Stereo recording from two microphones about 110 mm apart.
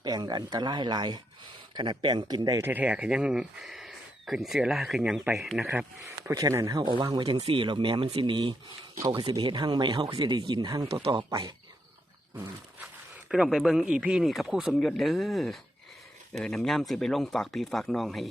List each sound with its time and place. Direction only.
0.0 s speech: 40° right (ahead or behind)
2.6 s speech: 20° right (ahead or behind); by 5.6 s centre (ahead or behind)
6.3 s speech: 30° right (ahead or behind)
13.2 s speech: 5° right (ahead or behind)